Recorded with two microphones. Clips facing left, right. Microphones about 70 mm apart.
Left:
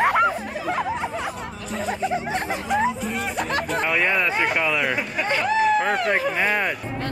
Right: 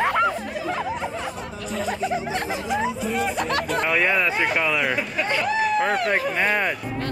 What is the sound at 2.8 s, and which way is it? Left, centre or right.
Speech, centre.